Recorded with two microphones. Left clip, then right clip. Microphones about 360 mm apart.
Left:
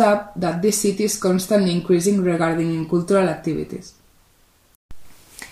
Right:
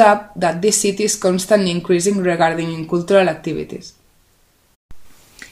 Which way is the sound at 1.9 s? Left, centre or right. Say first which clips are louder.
Right 4 dB; right.